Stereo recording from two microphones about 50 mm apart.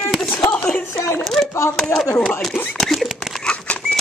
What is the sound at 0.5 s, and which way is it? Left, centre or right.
Speech, left.